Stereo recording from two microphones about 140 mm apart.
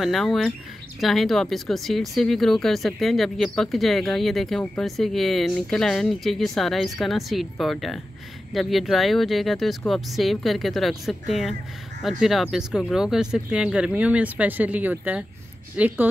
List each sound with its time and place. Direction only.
0.0 s speech: centre (ahead or behind)